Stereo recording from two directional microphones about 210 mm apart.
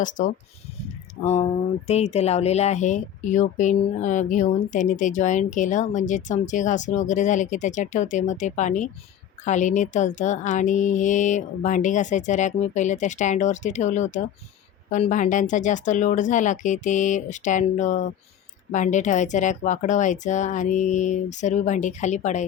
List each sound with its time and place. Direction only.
0.0 s a woman's voice: 40° left (ahead or behind)